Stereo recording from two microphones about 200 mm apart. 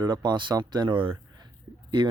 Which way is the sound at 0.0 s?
20° right (ahead or behind).